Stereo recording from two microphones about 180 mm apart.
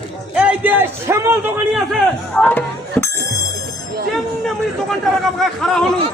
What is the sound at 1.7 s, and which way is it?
Speech, 5° left (ahead or behind).